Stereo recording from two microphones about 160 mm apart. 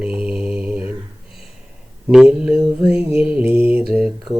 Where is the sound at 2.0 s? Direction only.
5° right (ahead or behind).